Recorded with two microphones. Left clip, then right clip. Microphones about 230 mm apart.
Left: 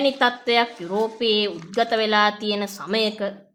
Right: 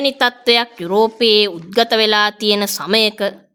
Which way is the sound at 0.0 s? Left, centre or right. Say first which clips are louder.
Right 4 dB; right.